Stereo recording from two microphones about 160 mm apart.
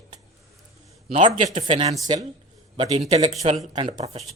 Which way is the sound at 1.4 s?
40° right (ahead or behind).